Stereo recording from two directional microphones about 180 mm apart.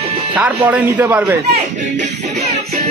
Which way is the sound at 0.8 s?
10° right (ahead or behind).